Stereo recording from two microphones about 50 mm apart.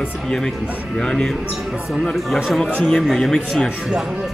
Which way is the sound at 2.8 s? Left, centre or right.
Centre.